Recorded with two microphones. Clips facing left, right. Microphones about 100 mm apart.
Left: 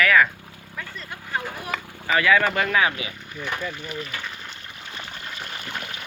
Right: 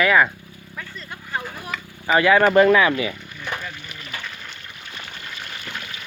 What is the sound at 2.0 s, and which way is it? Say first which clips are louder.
Speech: right 4 dB; 25° right (ahead or behind).